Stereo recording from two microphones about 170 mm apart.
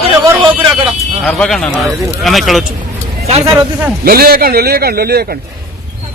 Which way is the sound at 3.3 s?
30° right (ahead or behind).